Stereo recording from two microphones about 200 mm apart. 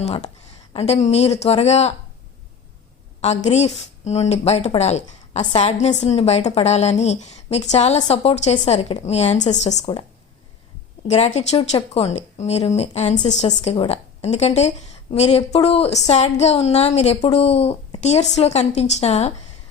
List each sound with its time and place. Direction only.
0.0 s speech: 35° left (ahead or behind)
3.2 s speech: 35° left (ahead or behind)
9.8 s a woman's voice: 25° left (ahead or behind)
11.1 s speech: 35° left (ahead or behind)